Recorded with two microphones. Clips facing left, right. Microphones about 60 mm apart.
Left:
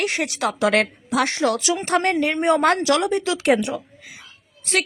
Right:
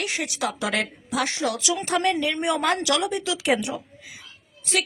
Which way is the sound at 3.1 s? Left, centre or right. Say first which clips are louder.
Left 5 dB; left.